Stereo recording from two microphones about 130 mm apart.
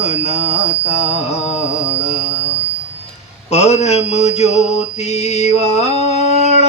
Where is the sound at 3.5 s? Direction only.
60° left (ahead or behind).